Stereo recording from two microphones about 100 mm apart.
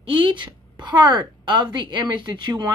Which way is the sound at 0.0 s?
55° right (ahead or behind).